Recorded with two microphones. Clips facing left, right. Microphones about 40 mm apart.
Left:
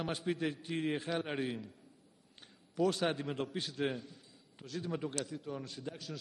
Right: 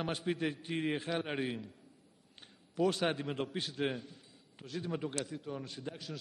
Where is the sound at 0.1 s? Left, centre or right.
Centre.